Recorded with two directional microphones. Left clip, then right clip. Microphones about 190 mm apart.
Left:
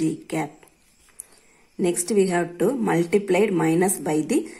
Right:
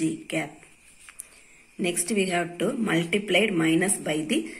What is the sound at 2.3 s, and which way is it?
A woman's voice, 55° left (ahead or behind).